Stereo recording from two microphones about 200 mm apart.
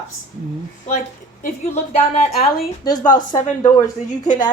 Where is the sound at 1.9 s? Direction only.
30° left (ahead or behind).